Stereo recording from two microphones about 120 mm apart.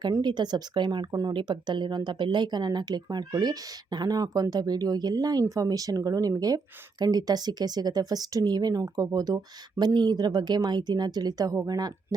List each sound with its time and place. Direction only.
0.0 s speech: 35° right (ahead or behind)